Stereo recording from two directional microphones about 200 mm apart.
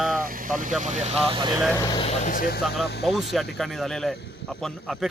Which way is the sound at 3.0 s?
Centre (ahead or behind).